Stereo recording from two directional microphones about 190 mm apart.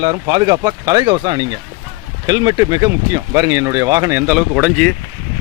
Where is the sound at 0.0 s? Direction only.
30° right (ahead or behind).